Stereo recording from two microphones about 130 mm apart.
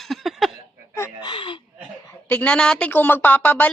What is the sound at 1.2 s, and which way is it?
Speech, 40° left (ahead or behind).